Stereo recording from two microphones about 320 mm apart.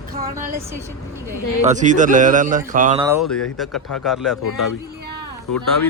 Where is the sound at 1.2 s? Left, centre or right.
Centre.